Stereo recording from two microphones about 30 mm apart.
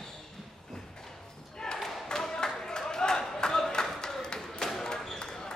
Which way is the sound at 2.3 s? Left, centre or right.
Left.